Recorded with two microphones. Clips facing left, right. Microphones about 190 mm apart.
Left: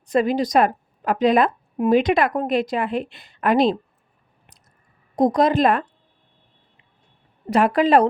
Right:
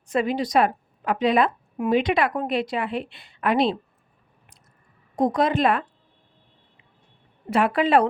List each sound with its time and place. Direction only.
0.1 s a woman's voice: 40° left (ahead or behind)
5.1 s speech: 40° left (ahead or behind)
7.5 s speech: 40° left (ahead or behind)